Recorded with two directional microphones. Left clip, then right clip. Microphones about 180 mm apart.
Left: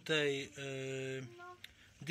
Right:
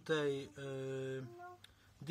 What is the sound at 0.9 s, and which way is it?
Speech, 15° left (ahead or behind).